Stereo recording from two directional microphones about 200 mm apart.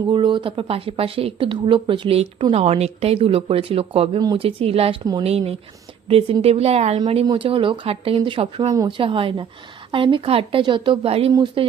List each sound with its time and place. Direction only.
0.1 s speech: 25° right (ahead or behind)